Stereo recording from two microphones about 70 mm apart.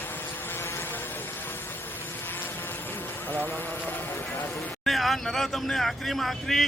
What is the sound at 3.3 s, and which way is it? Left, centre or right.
Speech, left.